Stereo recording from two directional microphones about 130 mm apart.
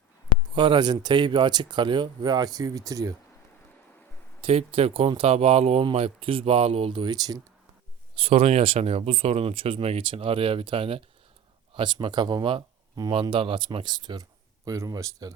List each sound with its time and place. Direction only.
0.5 s speech: 40° right (ahead or behind)
4.4 s speech: 45° right (ahead or behind)
8.1 s speech: 50° right (ahead or behind); by 15.3 s 30° right (ahead or behind)